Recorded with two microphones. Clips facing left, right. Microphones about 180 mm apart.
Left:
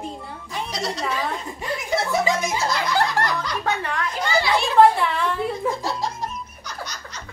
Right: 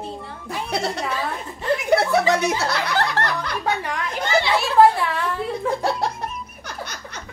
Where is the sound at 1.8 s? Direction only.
65° right (ahead or behind).